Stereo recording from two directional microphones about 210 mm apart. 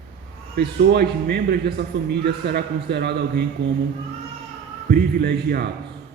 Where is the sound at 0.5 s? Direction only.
50° right (ahead or behind).